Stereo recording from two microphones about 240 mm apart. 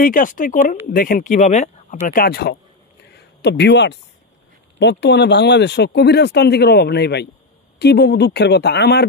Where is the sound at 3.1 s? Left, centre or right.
Left.